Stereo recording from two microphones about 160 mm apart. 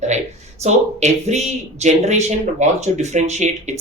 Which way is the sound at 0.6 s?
45° right (ahead or behind).